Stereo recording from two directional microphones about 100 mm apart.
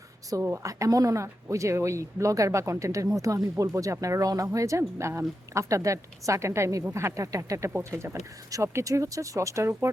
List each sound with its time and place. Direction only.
0.4 s speech: 30° right (ahead or behind)
7.7 s speech: 20° right (ahead or behind)